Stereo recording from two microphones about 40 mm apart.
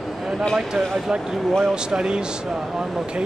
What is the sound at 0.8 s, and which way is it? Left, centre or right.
Speech, centre.